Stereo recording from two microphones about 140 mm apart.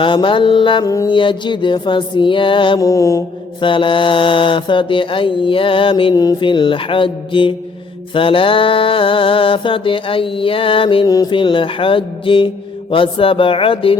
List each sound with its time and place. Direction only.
0.0 s mantra: 35° left (ahead or behind)
0.9 s mantra: 25° left (ahead or behind)
1.1 s mantra: 35° left (ahead or behind)
2.8 s mantra: 20° left (ahead or behind)
3.6 s mantra: 35° left (ahead or behind)